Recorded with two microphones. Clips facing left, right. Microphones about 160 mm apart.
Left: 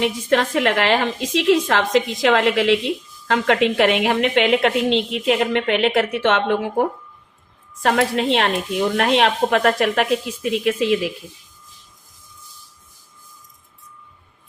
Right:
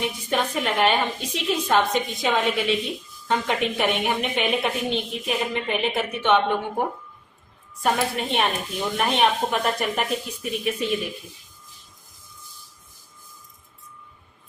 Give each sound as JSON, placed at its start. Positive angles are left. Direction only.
{"t": 0.0, "sound": "a woman's voice", "side_deg": 90}
{"t": 7.8, "sound": "a woman's voice", "side_deg": 85}